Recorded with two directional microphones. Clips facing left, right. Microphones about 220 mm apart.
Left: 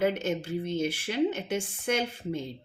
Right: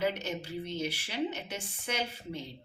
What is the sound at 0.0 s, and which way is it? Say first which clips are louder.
A woman's voice: left 5 dB; 50° left (ahead or behind).